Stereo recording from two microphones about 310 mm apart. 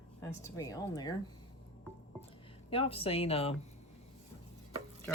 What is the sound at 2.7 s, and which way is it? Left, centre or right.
Speech, centre.